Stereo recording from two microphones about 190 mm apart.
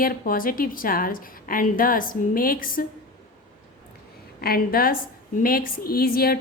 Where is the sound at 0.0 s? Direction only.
50° left (ahead or behind).